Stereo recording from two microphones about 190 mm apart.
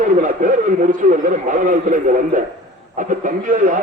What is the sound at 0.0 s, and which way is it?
A man's voice, 45° right (ahead or behind).